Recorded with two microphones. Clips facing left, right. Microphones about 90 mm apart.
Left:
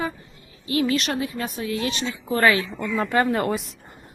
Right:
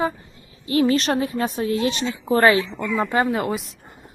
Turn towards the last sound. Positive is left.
turn(degrees=0)  # may be behind; listen again after turning